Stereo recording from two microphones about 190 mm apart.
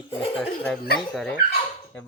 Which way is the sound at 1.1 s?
5° left (ahead or behind).